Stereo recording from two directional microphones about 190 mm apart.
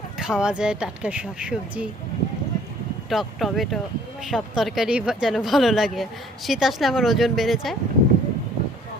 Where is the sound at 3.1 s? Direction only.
Centre (ahead or behind).